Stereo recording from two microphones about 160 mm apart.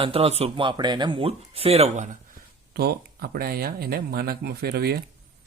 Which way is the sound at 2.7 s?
75° right (ahead or behind).